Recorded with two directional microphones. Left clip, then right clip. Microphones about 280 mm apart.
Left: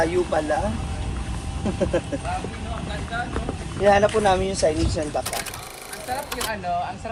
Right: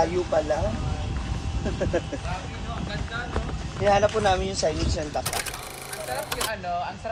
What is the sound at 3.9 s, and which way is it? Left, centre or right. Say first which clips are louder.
Speech: left 3 dB; left.